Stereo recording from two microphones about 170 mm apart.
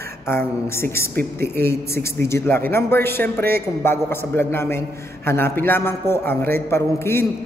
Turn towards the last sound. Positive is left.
turn(degrees=15)  # may be behind; listen again after turning